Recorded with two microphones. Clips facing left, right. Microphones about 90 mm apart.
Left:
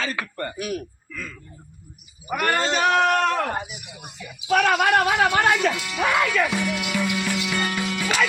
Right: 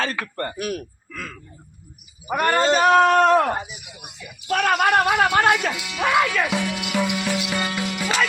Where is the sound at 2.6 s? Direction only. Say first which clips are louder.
Right 6 dB; 40° right (ahead or behind).